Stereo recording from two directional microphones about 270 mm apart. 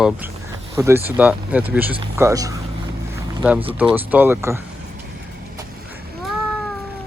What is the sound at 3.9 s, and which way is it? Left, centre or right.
Speech, centre.